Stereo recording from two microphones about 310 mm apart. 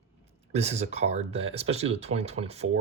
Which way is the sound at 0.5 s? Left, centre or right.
Right.